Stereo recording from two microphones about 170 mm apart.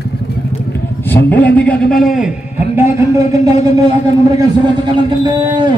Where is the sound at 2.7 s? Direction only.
15° right (ahead or behind).